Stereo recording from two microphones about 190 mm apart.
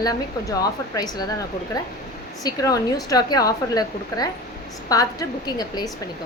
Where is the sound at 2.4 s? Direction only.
20° left (ahead or behind).